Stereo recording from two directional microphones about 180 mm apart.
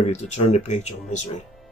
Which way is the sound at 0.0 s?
40° left (ahead or behind).